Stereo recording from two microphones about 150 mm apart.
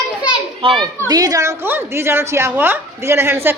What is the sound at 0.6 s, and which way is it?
A woman's voice, 35° right (ahead or behind).